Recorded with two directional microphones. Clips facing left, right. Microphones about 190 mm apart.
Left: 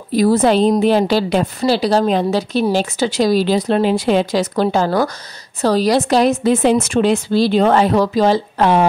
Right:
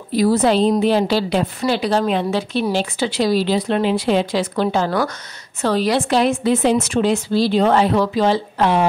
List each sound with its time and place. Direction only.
0.1 s a woman's voice: 50° left (ahead or behind)
1.7 s a woman's voice: 35° left (ahead or behind)